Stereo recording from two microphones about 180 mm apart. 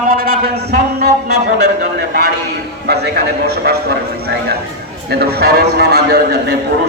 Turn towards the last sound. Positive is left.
turn(degrees=-65)  # may be behind; listen again after turning